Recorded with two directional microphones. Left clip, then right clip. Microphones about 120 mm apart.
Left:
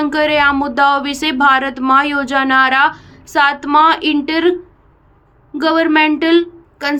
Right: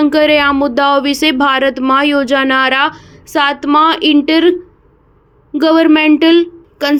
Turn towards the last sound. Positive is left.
turn(degrees=-45)  # may be behind; listen again after turning